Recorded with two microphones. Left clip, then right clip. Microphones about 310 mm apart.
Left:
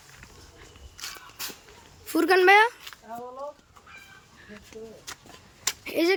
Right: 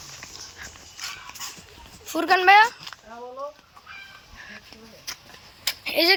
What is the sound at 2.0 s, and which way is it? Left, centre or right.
Speech, centre.